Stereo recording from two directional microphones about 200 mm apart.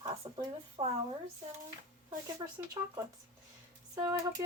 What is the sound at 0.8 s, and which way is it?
Speech, 20° right (ahead or behind).